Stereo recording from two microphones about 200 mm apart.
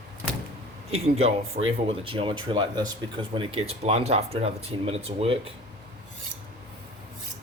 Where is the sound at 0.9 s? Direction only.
30° right (ahead or behind).